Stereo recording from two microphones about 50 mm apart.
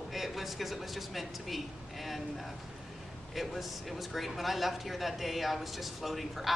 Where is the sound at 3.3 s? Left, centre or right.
Centre.